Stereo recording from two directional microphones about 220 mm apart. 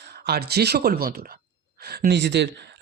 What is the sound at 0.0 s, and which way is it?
Speech, 45° right (ahead or behind).